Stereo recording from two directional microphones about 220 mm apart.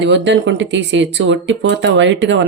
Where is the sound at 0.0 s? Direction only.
55° right (ahead or behind).